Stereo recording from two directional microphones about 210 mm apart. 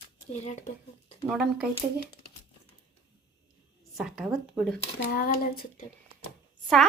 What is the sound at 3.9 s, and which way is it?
Speech, centre (ahead or behind).